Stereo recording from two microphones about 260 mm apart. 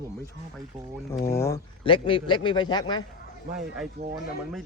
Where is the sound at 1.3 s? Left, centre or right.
Centre.